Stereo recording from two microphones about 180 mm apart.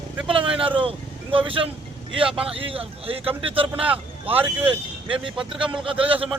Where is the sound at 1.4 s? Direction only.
30° right (ahead or behind).